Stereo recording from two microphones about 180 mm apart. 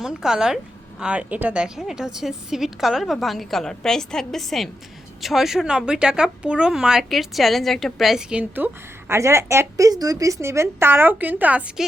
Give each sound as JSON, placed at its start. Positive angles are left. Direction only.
{"t": 0.0, "sound": "a woman's voice", "side_deg": -5}